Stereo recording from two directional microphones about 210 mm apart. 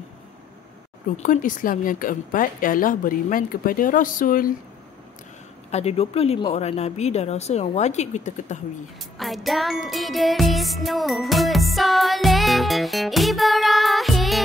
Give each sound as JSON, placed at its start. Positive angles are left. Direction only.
{"t": 1.1, "sound": "speech", "side_deg": 35}
{"t": 5.7, "sound": "speech", "side_deg": 30}
{"t": 9.2, "sound": "music", "side_deg": 0}